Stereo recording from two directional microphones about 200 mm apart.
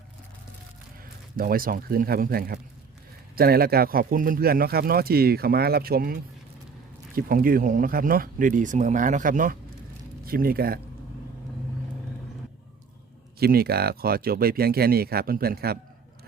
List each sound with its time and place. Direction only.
1.4 s speech: 45° right (ahead or behind)
13.4 s speech: 50° right (ahead or behind)